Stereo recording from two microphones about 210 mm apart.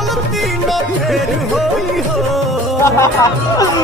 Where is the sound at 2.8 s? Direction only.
15° left (ahead or behind).